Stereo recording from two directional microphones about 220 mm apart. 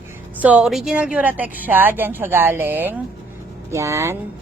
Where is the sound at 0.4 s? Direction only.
5° right (ahead or behind).